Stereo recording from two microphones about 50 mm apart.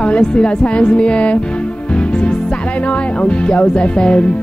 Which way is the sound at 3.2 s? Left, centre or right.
Left.